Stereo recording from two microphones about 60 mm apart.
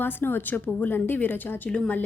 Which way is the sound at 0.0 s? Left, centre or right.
Left.